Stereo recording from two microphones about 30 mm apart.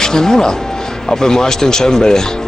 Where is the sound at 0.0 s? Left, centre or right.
Left.